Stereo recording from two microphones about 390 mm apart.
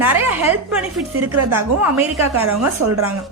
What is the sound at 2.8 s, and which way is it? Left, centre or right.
Speech, right.